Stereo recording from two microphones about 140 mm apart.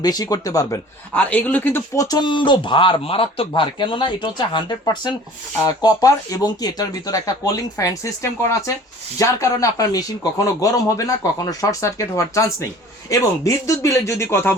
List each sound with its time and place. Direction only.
0.0 s speech: 25° left (ahead or behind)
1.1 s speech: 10° left (ahead or behind)
2.0 s speech: 30° left (ahead or behind)